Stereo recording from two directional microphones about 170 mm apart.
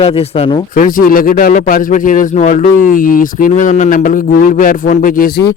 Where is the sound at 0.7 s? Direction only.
55° left (ahead or behind).